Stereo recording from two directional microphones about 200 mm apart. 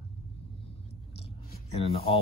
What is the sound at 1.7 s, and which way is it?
Speech, 30° left (ahead or behind).